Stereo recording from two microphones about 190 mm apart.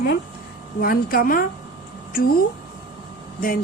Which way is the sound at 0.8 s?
50° left (ahead or behind).